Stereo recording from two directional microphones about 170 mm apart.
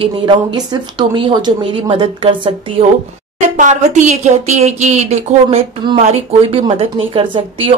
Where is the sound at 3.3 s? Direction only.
45° right (ahead or behind).